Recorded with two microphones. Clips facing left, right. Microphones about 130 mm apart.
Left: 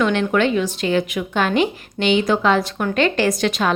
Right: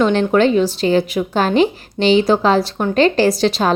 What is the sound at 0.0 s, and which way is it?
A woman's voice, 35° right (ahead or behind).